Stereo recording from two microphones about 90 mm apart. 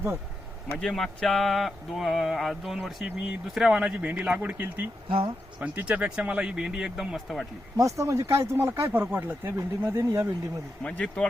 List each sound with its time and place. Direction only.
0.8 s speech: 5° left (ahead or behind); by 4.9 s 20° right (ahead or behind)
5.0 s speech: 70° right (ahead or behind)
5.5 s speech: 20° right (ahead or behind)
7.8 s speech: 35° right (ahead or behind)
10.8 s speech: 10° left (ahead or behind)